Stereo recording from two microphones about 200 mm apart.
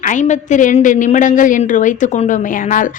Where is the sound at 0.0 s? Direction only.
40° left (ahead or behind).